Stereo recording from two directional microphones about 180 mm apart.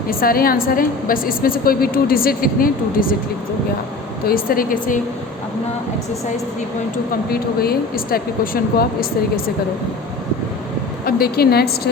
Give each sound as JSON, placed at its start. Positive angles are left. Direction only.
{"t": 0.1, "sound": "a woman's voice", "side_deg": 55}
{"t": 4.3, "sound": "a woman's voice", "side_deg": 55}
{"t": 7.1, "sound": "speech", "side_deg": 55}
{"t": 11.0, "sound": "speech", "side_deg": 60}